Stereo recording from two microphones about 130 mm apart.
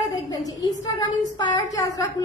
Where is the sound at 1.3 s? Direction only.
35° left (ahead or behind).